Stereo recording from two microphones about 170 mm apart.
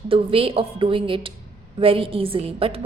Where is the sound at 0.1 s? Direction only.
35° right (ahead or behind).